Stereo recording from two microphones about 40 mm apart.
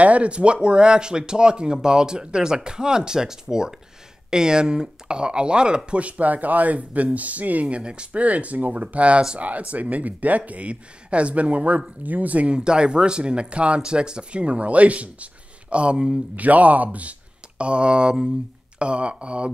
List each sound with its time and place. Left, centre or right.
0.0 s speech: right
7.6 s speech: right
8.2 s speech: right
12.4 s speech: right
16.3 s speech: right
17.6 s speech: right